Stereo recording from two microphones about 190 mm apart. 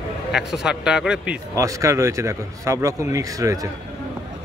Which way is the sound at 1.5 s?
15° right (ahead or behind).